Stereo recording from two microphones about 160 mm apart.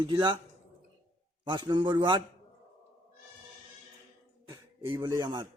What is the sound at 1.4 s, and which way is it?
Speech, 30° right (ahead or behind).